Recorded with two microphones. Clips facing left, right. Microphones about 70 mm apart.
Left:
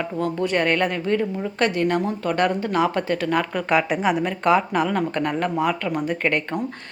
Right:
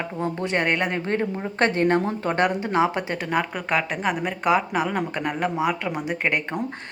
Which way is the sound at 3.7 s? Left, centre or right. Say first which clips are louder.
Left 4 dB; centre.